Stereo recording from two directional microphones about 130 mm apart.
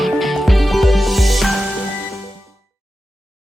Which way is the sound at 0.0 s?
Centre (ahead or behind).